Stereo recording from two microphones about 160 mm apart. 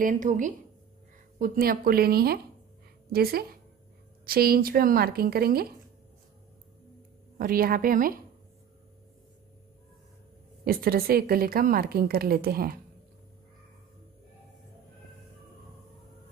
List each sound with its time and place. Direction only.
0.0 s a woman's voice: 55° right (ahead or behind)
1.4 s a woman's voice: 65° right (ahead or behind)
7.3 s a woman's voice: 65° right (ahead or behind)
10.6 s a woman's voice: 70° right (ahead or behind)